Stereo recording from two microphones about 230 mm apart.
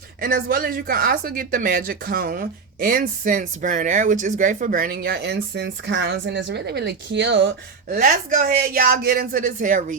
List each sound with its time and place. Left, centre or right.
0.2 s speech: right
7.9 s speech: right